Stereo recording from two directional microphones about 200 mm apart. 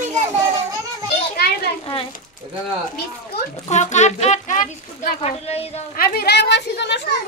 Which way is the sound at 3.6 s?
35° left (ahead or behind).